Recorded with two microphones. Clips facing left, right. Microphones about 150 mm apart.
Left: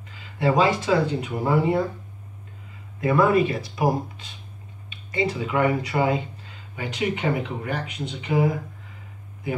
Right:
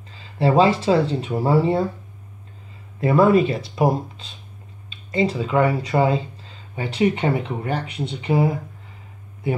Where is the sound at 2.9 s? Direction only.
30° right (ahead or behind).